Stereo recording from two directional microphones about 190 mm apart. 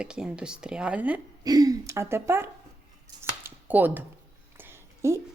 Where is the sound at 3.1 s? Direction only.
20° right (ahead or behind).